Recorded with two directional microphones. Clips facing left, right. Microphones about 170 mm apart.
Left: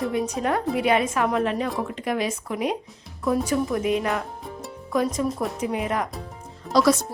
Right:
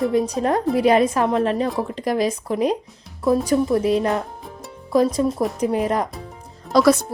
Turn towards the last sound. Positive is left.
turn(degrees=-60)  # may be behind; listen again after turning